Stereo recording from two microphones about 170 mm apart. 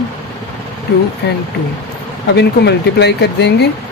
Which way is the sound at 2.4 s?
80° left.